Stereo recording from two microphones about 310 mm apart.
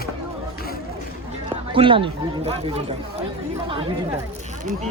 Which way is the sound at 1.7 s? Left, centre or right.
Centre.